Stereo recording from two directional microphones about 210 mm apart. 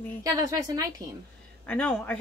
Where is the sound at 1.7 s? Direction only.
5° left (ahead or behind).